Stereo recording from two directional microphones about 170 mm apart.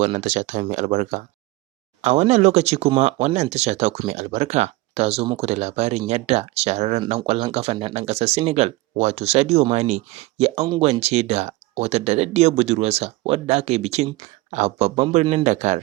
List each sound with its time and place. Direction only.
0.0 s speech: 45° right (ahead or behind)